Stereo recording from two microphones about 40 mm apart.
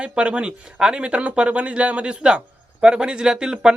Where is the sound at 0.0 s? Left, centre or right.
Right.